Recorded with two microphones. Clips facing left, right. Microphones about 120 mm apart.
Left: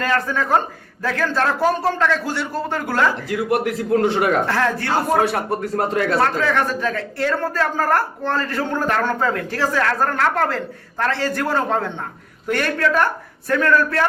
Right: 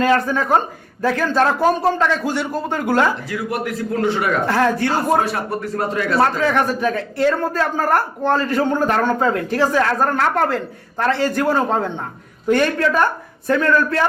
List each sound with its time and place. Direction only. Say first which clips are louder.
0.0 s a man's voice: right 4 dB; 15° right (ahead or behind)
3.2 s a man's voice: left 3 dB; 65° left (ahead or behind)
4.4 s a man's voice: right 3 dB; 15° right (ahead or behind)
5.2 s speech: left 2 dB; 55° left (ahead or behind)
6.1 s a man's voice: right 5 dB; 15° right (ahead or behind)